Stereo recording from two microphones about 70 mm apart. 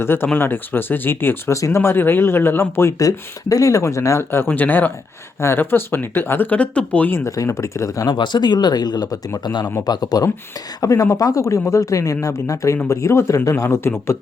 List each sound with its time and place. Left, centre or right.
0.0 s speech: left
1.5 s speech: left
3.0 s speech: left
4.4 s speech: left
6.6 s speech: centre
7.3 s speech: left
8.0 s speech: left
9.8 s speech: left